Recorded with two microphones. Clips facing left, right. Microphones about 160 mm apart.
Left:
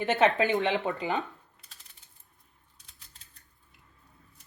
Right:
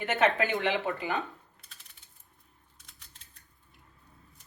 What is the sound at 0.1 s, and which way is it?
Speech, 20° left (ahead or behind).